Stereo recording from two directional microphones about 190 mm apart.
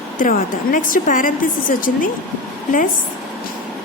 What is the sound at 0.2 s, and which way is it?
Speech, 45° left (ahead or behind).